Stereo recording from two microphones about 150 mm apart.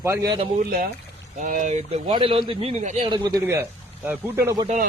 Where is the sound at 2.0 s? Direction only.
35° right (ahead or behind).